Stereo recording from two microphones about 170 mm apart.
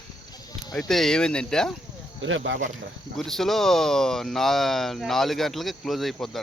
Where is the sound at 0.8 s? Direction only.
Centre (ahead or behind).